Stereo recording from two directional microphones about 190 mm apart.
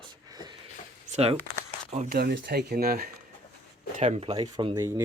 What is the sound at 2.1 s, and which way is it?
Speech, 55° right (ahead or behind).